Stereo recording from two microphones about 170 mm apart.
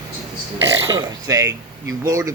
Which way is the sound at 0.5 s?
90° right.